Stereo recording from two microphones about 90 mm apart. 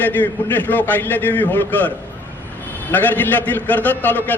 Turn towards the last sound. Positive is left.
turn(degrees=20)  # may be behind; listen again after turning